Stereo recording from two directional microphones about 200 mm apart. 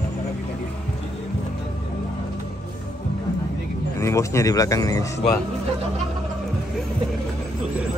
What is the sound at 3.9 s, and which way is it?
Speech, 15° left (ahead or behind).